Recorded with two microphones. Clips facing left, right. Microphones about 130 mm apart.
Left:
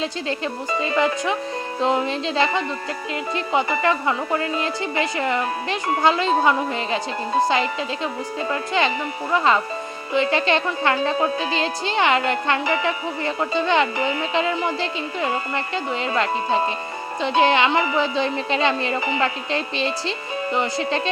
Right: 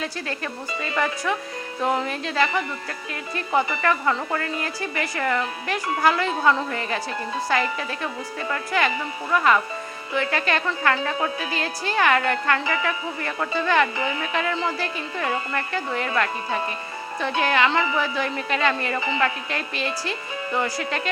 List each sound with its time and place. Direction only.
0.0 s speech: 25° left (ahead or behind)